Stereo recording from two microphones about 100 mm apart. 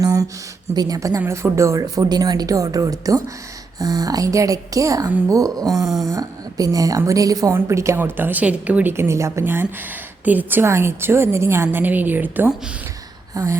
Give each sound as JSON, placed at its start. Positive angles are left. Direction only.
{"t": 0.0, "sound": "a sound", "side_deg": -35}
{"t": 0.7, "sound": "a woman's voice", "side_deg": -40}
{"t": 13.3, "sound": "a woman's voice", "side_deg": -30}